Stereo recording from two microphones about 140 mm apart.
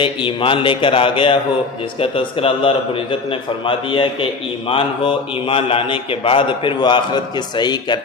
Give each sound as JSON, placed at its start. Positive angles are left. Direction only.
{"t": 0.0, "sound": "a man's voice", "side_deg": 35}